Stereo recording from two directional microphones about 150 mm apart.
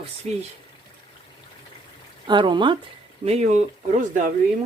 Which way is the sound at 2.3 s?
30° right (ahead or behind).